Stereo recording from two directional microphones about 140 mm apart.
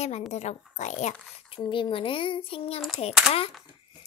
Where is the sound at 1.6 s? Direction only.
35° left (ahead or behind).